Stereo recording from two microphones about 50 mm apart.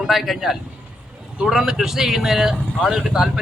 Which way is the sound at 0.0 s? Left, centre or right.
Centre.